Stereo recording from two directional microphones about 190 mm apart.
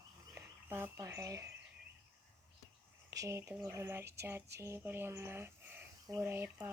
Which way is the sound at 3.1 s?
15° right (ahead or behind).